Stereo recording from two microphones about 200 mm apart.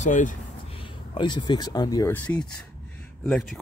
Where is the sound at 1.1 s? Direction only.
20° left (ahead or behind).